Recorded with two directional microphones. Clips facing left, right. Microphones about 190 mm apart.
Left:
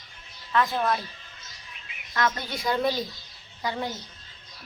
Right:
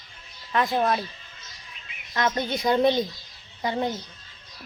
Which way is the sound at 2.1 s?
20° right (ahead or behind).